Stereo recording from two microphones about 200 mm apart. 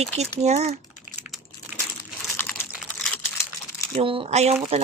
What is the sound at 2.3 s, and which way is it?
Typing, 10° left (ahead or behind).